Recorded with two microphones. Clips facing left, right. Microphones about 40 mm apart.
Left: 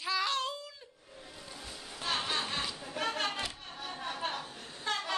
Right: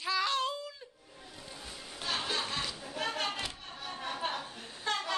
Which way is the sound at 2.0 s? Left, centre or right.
Centre.